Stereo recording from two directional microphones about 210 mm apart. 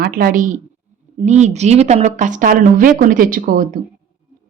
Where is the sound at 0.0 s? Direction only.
45° right (ahead or behind).